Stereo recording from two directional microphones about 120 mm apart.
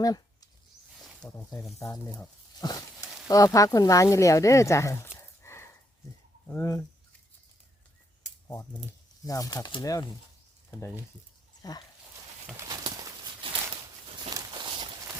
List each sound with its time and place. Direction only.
1.2 s a sound: 30° left (ahead or behind)
2.6 s a sound: 35° left (ahead or behind)
3.2 s speech: 30° left (ahead or behind)
5.4 s sniff: 20° left (ahead or behind)
6.5 s speech: 20° left (ahead or behind)
9.2 s speech: 30° left (ahead or behind)
12.7 s clip-clop: 35° right (ahead or behind)
13.4 s a sound: 45° right (ahead or behind)
14.3 s walk: 35° right (ahead or behind)